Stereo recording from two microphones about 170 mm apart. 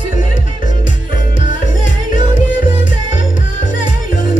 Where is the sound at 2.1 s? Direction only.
50° left (ahead or behind).